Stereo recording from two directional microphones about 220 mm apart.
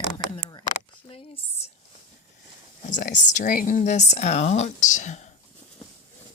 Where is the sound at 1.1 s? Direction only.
25° left (ahead or behind).